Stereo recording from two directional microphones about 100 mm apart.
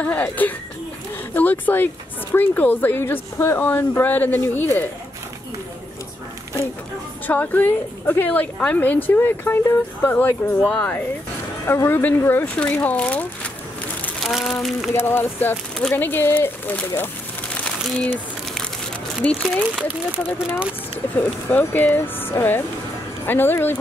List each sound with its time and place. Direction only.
0.0 s a woman's voice: 15° left (ahead or behind)
7.2 s a woman's voice: 15° left (ahead or behind)
14.2 s speech: centre (ahead or behind)
15.0 s speech: 20° left (ahead or behind)
18.0 s a sound: 5° left (ahead or behind)
19.2 s a woman's voice: 15° left (ahead or behind)
21.5 s speech: 20° left (ahead or behind)